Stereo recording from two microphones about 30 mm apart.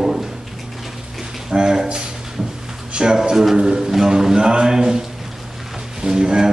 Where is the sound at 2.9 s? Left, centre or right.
Right.